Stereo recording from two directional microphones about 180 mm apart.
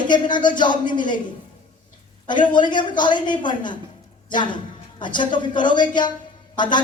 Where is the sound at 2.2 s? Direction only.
25° left (ahead or behind).